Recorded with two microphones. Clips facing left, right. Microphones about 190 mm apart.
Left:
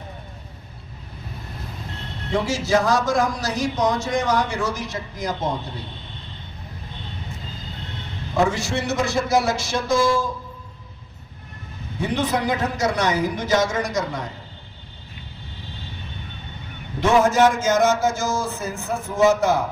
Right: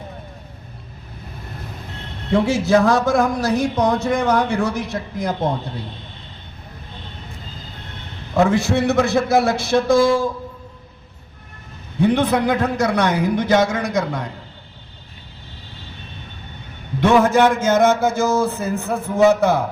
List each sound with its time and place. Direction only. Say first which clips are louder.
2.3 s speech: right 5 dB; 60° right (ahead or behind)
8.4 s speech: right 7 dB; 55° right (ahead or behind)
12.0 s speech: right 6 dB; 60° right (ahead or behind)
17.0 s speech: right 2 dB; 60° right (ahead or behind)